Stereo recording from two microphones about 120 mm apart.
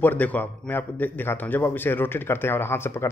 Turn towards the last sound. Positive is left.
turn(degrees=20)  # may be behind; listen again after turning